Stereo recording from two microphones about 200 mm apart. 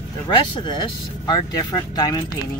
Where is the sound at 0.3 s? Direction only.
25° left (ahead or behind).